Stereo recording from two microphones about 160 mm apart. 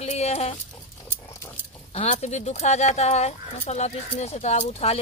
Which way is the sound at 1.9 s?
40° left (ahead or behind).